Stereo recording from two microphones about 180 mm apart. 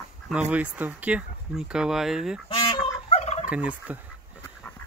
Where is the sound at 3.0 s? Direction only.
35° left (ahead or behind).